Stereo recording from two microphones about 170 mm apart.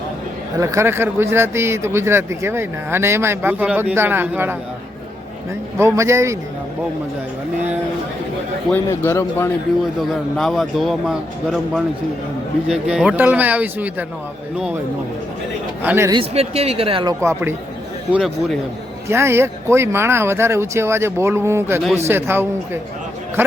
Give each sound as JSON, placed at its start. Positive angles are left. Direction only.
{"t": 0.6, "sound": "speech", "side_deg": -15}
{"t": 5.8, "sound": "speech", "side_deg": -15}
{"t": 8.7, "sound": "a man's voice", "side_deg": 15}
{"t": 10.3, "sound": "speech", "side_deg": 0}
{"t": 15.8, "sound": "speech", "side_deg": -15}
{"t": 16.1, "sound": "speech", "side_deg": -35}
{"t": 17.2, "sound": "speech", "side_deg": -15}
{"t": 19.0, "sound": "speech", "side_deg": -15}